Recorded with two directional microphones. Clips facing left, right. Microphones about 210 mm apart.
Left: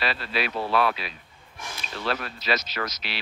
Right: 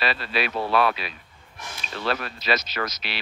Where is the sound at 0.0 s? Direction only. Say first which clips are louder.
Right 2 dB; 65° right (ahead or behind).